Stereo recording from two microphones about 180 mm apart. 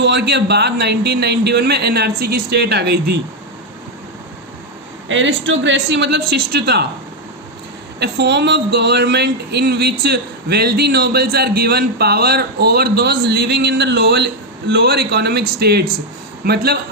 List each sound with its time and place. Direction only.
0.0 s a man's voice: 75° right (ahead or behind)
5.0 s a man's voice: 90° right; by 6.8 s 65° right (ahead or behind)
7.9 s speech: 70° right (ahead or behind)